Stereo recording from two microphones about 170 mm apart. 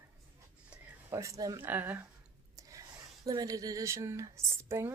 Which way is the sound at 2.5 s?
20° right (ahead or behind).